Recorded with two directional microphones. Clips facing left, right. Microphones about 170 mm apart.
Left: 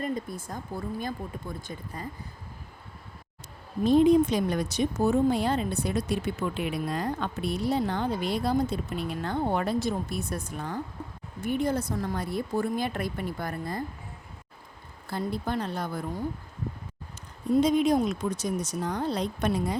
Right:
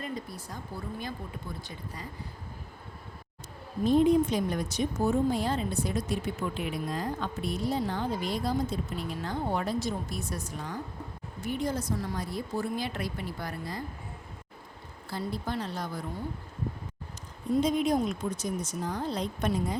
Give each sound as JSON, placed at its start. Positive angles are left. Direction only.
{"t": 0.0, "sound": "speech", "side_deg": 50}
{"t": 3.8, "sound": "a woman's voice", "side_deg": 85}
{"t": 15.1, "sound": "speech", "side_deg": 55}
{"t": 17.6, "sound": "speech", "side_deg": 80}